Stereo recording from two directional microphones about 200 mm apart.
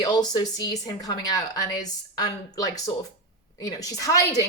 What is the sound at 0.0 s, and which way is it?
Speech, 20° left (ahead or behind).